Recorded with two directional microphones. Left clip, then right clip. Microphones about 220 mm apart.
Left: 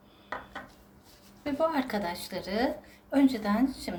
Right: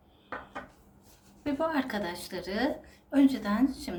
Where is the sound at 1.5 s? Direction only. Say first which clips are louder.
Left 2 dB; 20° left (ahead or behind).